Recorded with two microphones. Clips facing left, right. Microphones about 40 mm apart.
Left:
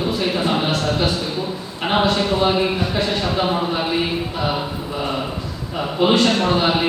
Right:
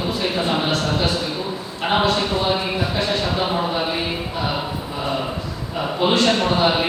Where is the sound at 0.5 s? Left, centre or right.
Centre.